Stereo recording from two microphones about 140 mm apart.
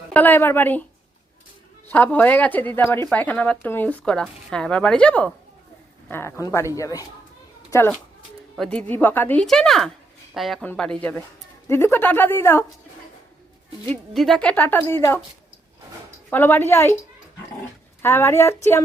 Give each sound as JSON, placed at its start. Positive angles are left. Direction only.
{"t": 0.1, "sound": "speech", "side_deg": 10}
{"t": 1.9, "sound": "a woman's voice", "side_deg": 10}
{"t": 8.5, "sound": "speech", "side_deg": 5}
{"t": 8.9, "sound": "speech", "side_deg": 15}
{"t": 9.4, "sound": "speech", "side_deg": 5}
{"t": 11.7, "sound": "speech", "side_deg": 15}
{"t": 14.1, "sound": "speech", "side_deg": 0}
{"t": 16.3, "sound": "speech", "side_deg": 15}
{"t": 18.0, "sound": "speech", "side_deg": 15}